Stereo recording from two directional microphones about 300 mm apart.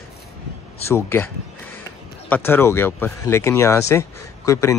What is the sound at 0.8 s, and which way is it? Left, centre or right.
Speech, centre.